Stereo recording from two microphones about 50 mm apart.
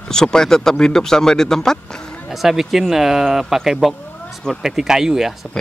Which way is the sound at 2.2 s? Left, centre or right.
Centre.